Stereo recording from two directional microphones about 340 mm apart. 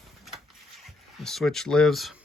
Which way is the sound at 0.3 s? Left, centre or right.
Centre.